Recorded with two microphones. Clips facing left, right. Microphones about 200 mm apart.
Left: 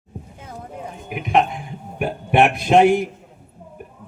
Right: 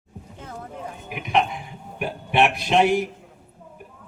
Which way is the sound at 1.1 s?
50° left (ahead or behind).